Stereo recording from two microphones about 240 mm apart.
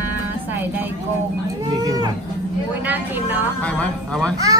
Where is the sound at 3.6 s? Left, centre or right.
Centre.